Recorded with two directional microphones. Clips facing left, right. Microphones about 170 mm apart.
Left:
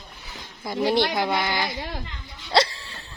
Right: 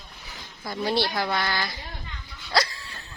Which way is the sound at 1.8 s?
80° left.